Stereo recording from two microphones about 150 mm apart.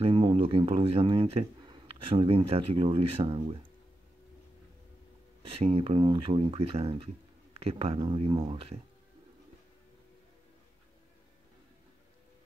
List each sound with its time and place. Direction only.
0.0 s speech: 35° right (ahead or behind)
5.5 s speech: 40° right (ahead or behind)